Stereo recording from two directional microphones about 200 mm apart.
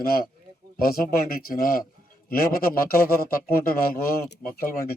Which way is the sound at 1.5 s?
45° left (ahead or behind).